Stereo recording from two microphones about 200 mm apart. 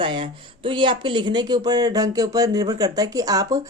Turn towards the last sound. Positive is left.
turn(degrees=-20)  # may be behind; listen again after turning